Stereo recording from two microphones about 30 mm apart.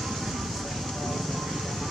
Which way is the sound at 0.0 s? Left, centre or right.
Centre.